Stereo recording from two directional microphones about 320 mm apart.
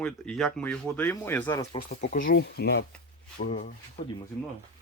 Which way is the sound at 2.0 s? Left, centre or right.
Left.